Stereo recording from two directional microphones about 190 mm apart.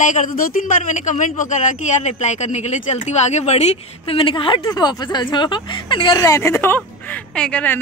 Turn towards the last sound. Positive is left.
turn(degrees=5)  # may be behind; listen again after turning